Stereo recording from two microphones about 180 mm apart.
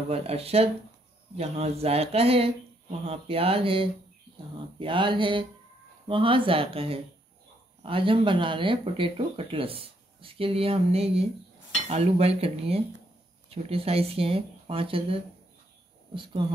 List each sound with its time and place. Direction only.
0.1 s speech: 35° right (ahead or behind)
4.7 s a sound: 30° right (ahead or behind)
6.0 s speech: 30° right (ahead or behind)